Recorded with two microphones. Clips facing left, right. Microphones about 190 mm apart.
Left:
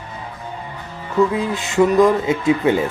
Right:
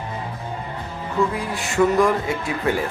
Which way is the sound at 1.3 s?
20° left (ahead or behind).